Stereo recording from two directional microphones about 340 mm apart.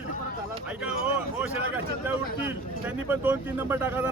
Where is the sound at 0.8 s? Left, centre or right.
Centre.